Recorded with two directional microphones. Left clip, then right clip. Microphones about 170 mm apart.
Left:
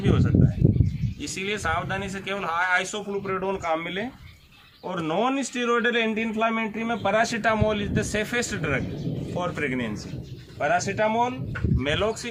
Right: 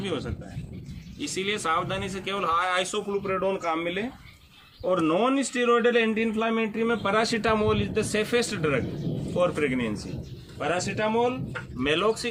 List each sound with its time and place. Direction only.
0.0 s a man's voice: 20° left (ahead or behind)